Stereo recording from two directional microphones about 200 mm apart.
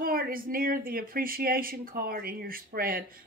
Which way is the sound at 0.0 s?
45° right (ahead or behind).